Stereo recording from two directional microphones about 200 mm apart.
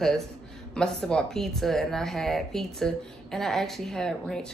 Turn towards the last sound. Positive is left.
turn(degrees=5)  # may be behind; listen again after turning